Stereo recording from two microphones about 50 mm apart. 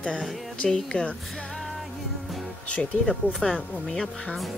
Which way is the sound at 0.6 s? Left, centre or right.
Centre.